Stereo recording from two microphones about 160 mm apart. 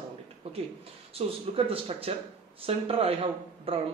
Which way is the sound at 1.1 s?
35° right (ahead or behind).